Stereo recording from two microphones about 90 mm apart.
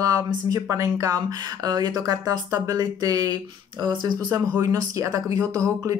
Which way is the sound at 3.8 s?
55° right (ahead or behind).